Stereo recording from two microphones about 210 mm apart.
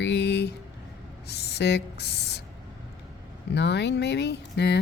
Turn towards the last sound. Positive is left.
turn(degrees=55)  # may be behind; listen again after turning